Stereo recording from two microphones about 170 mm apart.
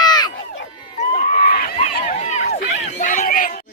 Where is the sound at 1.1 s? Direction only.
50° left (ahead or behind).